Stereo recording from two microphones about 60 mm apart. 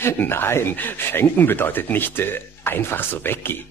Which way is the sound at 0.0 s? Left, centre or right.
Left.